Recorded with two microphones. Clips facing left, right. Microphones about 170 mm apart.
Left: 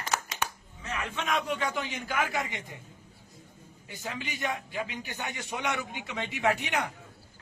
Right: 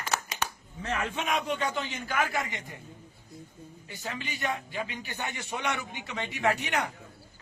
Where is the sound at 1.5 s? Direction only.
5° left (ahead or behind).